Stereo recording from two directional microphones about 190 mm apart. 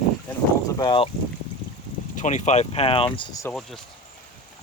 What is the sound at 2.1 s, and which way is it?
Speech, 40° left (ahead or behind).